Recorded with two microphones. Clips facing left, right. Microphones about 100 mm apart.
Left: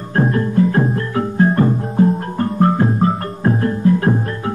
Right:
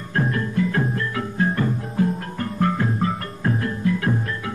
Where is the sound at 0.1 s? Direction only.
35° left (ahead or behind).